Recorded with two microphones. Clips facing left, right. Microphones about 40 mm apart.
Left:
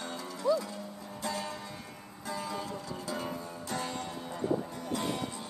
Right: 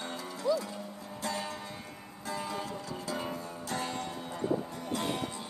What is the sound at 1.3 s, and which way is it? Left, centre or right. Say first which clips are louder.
Music: even; centre.